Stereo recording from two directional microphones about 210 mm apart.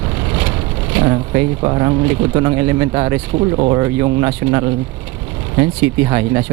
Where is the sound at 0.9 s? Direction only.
15° right (ahead or behind).